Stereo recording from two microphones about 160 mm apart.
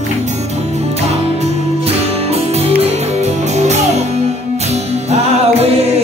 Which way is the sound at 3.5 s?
45° right (ahead or behind).